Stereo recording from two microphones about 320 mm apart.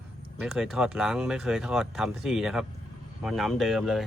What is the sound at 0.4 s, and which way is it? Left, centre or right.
Speech, centre.